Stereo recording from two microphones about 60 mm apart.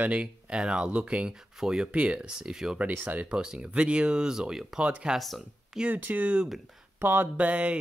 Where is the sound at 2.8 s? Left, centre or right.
Right.